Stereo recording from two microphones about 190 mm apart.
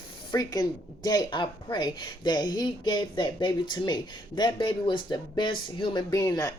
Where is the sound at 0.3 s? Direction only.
20° left (ahead or behind).